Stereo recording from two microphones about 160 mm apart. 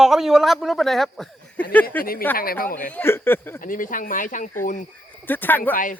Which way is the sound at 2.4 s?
65° left (ahead or behind).